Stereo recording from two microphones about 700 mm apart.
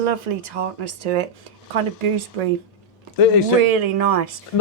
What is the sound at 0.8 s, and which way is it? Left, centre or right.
Speech, right.